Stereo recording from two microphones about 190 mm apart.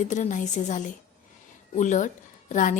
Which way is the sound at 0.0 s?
40° left (ahead or behind).